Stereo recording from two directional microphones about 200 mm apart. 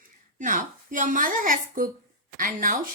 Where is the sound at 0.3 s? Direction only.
40° right (ahead or behind).